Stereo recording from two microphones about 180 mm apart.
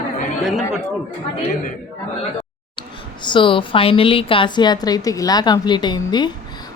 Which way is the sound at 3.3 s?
30° left (ahead or behind).